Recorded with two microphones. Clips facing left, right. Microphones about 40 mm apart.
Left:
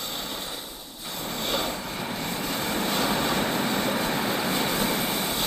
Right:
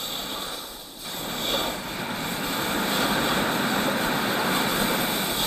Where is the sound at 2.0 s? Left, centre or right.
Centre.